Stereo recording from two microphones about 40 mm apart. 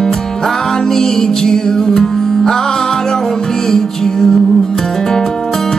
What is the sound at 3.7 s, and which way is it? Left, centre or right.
Music, centre.